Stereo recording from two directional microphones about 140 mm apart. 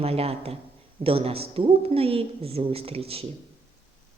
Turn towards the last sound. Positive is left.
turn(degrees=-45)  # may be behind; listen again after turning